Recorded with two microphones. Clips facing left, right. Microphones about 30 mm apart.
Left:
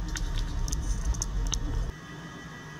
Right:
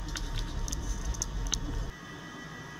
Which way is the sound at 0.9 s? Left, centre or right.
Centre.